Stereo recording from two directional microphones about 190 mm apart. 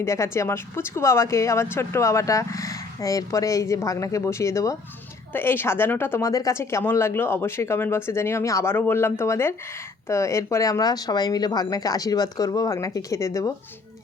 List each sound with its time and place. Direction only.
0.0 s a woman's voice: 15° left (ahead or behind)